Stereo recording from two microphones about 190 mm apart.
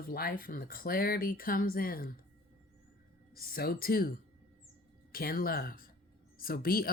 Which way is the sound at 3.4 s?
50° left (ahead or behind).